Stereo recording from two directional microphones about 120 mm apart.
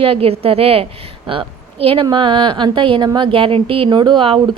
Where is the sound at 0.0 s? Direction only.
55° right (ahead or behind).